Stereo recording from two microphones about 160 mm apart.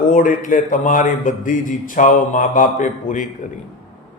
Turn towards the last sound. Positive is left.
turn(degrees=55)  # may be behind; listen again after turning